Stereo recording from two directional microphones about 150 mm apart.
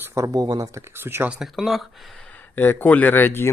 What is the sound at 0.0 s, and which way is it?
Speech, 20° right (ahead or behind).